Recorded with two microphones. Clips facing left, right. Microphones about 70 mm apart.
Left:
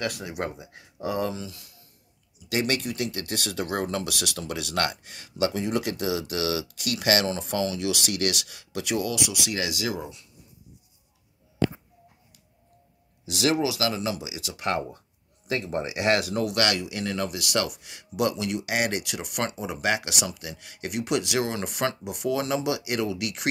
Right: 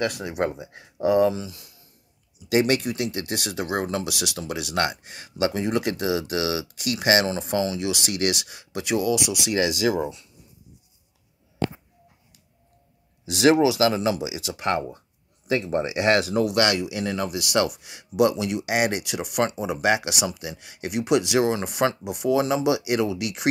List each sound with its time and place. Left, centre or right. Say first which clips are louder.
0.0 s speech: right 5 dB; right
1.0 s speech: right 9 dB; centre; by 10.2 s right
13.2 s speech: right 7 dB; right
15.4 s speech: right 5 dB; centre
16.4 s speech: right 4 dB; right